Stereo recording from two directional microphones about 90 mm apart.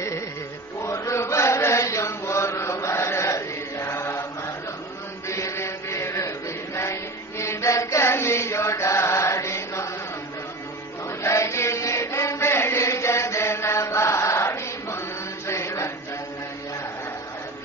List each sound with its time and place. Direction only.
0.7 s chant: 35° left (ahead or behind)
5.3 s chant: 30° left (ahead or behind)
11.1 s chant: 35° left (ahead or behind)